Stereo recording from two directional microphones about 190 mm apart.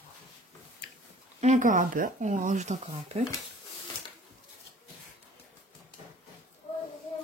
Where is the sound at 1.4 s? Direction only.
40° right (ahead or behind).